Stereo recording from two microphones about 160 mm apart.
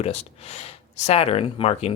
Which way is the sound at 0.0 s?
40° left (ahead or behind).